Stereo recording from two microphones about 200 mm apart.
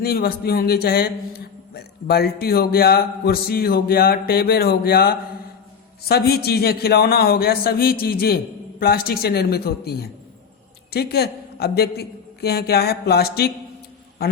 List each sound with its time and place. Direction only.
0.0 s a man's voice: 50° left (ahead or behind)